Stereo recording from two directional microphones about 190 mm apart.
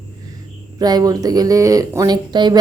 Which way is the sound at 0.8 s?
20° right (ahead or behind).